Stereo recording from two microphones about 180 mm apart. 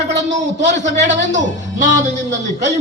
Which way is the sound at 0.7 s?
40° right (ahead or behind).